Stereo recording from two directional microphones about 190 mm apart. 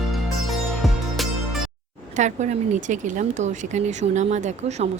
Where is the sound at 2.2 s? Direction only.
40° right (ahead or behind).